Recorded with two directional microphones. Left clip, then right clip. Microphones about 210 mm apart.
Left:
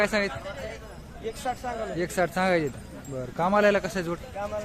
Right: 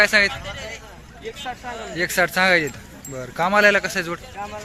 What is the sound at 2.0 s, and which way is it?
Speech, centre (ahead or behind).